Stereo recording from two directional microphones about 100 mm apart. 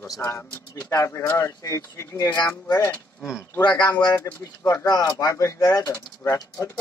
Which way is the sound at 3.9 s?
45° left (ahead or behind).